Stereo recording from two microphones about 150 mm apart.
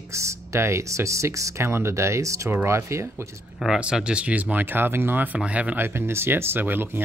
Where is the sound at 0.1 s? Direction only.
20° right (ahead or behind).